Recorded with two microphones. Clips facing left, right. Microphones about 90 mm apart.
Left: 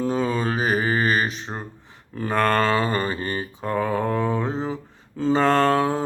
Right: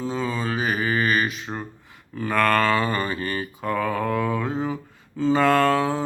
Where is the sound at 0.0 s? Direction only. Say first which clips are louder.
Left 4 dB; 50° left (ahead or behind).